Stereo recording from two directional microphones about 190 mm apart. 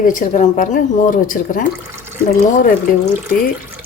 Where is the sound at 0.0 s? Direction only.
45° left (ahead or behind).